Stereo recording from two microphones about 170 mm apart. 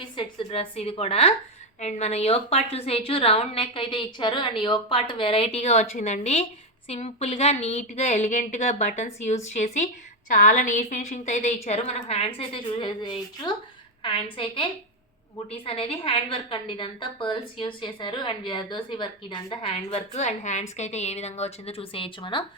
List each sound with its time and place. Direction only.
0.2 s a woman's voice: 35° left (ahead or behind)